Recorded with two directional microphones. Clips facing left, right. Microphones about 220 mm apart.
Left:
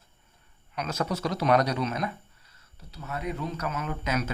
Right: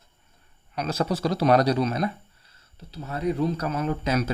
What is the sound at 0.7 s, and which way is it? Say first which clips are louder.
Speech: right 4 dB; 30° right (ahead or behind).